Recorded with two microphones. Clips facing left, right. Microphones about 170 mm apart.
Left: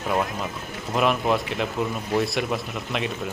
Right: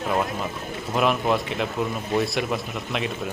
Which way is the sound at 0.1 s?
Centre (ahead or behind).